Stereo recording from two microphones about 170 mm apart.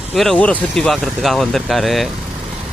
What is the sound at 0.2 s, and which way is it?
Speech, 5° left (ahead or behind).